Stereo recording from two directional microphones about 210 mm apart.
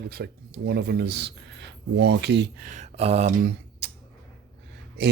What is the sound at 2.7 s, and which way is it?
Speech, 30° right (ahead or behind).